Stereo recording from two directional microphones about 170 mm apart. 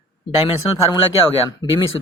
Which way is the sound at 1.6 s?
25° left (ahead or behind).